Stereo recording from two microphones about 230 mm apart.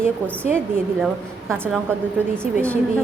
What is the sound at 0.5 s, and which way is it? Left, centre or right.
A woman's voice, centre.